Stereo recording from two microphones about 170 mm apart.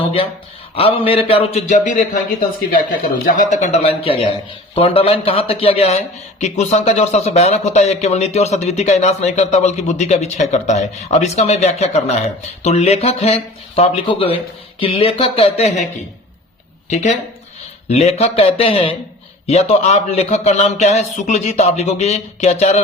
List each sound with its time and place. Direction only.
0.8 s speech: 35° left (ahead or behind)
3.2 s speech: 50° left (ahead or behind)
16.9 s speech: 45° left (ahead or behind)